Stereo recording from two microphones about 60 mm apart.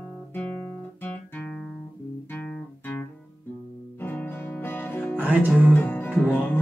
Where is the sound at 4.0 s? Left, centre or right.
Left.